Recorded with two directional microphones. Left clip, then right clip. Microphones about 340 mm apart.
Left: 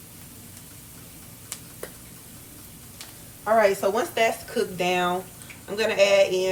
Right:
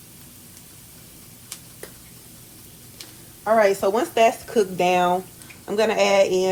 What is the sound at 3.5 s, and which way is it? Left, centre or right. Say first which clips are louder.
Speech: right 2 dB; right.